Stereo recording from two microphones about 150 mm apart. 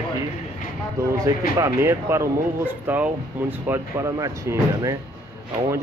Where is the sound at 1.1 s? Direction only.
20° right (ahead or behind).